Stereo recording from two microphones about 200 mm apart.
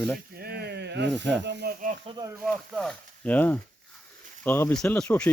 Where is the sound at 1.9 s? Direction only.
25° right (ahead or behind).